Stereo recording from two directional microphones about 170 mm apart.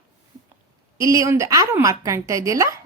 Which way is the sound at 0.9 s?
20° right (ahead or behind).